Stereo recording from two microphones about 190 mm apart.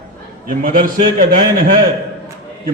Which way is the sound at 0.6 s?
45° right (ahead or behind).